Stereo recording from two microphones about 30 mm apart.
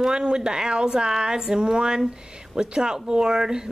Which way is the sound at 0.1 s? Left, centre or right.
Right.